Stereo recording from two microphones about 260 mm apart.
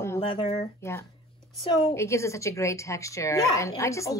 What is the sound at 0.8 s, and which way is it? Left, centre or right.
A woman's voice, centre.